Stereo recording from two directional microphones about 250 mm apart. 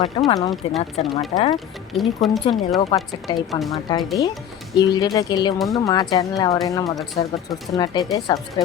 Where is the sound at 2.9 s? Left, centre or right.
Centre.